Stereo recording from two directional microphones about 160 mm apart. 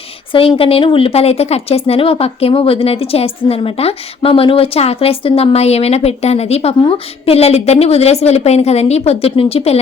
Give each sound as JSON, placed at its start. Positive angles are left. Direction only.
{"t": 0.3, "sound": "speech", "side_deg": 35}